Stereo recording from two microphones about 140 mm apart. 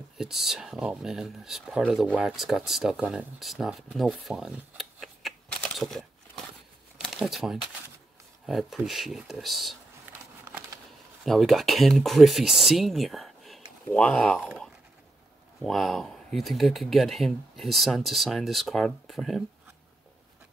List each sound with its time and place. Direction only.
0.2 s speech: 5° right (ahead or behind)
7.0 s a sound: centre (ahead or behind)
8.5 s speech: centre (ahead or behind)
10.5 s a sound: 20° right (ahead or behind)
11.2 s speech: centre (ahead or behind)
15.6 s speech: centre (ahead or behind)